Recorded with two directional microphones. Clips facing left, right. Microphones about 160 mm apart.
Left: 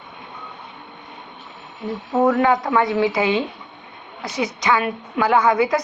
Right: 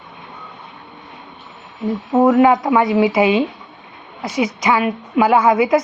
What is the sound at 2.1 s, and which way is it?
A woman's voice, 25° right (ahead or behind).